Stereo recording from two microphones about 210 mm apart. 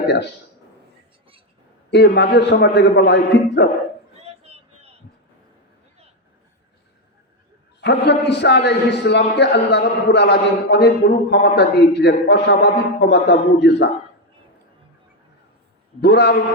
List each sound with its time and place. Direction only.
1.9 s a man's voice: 55° left (ahead or behind)
4.2 s a sound: 30° right (ahead or behind)
7.8 s a man's voice: 55° left (ahead or behind)
16.0 s a man's voice: 55° left (ahead or behind)